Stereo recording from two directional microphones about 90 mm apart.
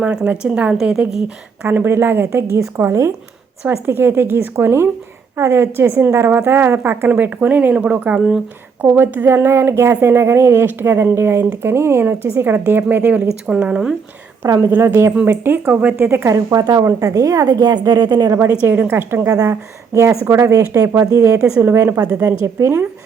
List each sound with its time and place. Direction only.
0.0 s a woman's voice: 10° right (ahead or behind)
1.6 s a woman's voice: 25° right (ahead or behind); by 13.9 s 10° right (ahead or behind)
14.6 s speech: 25° right (ahead or behind)
16.0 s speech: 25° right (ahead or behind)
16.3 s a woman's voice: 40° right (ahead or behind)
18.6 s speech: 20° right (ahead or behind)
19.2 s speech: 40° right (ahead or behind)
22.3 s speech: 30° right (ahead or behind)